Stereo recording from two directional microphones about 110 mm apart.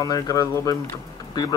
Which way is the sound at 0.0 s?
35° left (ahead or behind).